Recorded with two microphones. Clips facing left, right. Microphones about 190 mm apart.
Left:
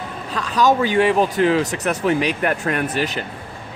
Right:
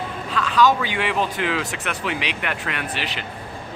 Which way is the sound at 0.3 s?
40° left (ahead or behind).